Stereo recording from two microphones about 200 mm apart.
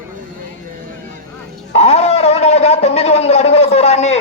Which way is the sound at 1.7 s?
30° left (ahead or behind).